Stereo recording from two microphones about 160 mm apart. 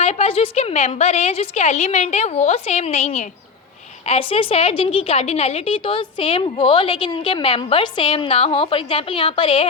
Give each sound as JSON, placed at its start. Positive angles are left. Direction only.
{"t": 0.0, "sound": "a woman's voice", "side_deg": 40}